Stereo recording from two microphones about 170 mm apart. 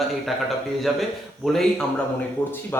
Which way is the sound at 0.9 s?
Centre (ahead or behind).